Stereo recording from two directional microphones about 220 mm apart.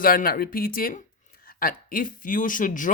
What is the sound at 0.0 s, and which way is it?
Speech, 40° left (ahead or behind).